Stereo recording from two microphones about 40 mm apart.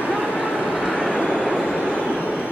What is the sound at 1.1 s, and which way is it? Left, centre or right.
Vehicle, left.